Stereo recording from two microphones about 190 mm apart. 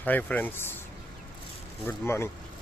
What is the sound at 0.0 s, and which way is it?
Speech, 10° left (ahead or behind).